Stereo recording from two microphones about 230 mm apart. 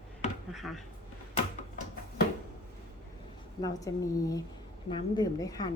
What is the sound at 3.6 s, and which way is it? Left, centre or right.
A woman's voice, centre.